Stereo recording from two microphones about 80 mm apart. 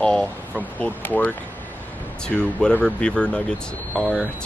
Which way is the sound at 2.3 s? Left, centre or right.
Centre.